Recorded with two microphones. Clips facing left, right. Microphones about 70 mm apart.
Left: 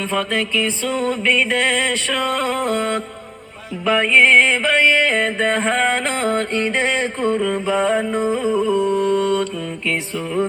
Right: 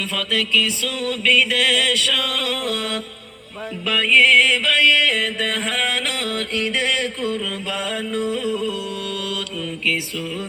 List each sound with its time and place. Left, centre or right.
0.0 s music: left